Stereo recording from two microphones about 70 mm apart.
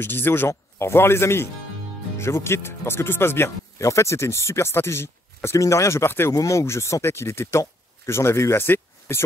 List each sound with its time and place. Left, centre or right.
0.0 s speech: left
6.3 s speech: left